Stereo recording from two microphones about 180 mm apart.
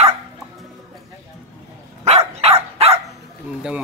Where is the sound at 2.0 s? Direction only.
35° right (ahead or behind).